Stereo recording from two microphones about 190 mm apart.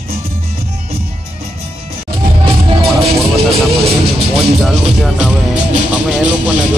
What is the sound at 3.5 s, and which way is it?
Speech, 30° right (ahead or behind).